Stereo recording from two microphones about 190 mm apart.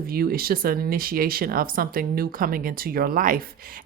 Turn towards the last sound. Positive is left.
turn(degrees=-45)  # may be behind; listen again after turning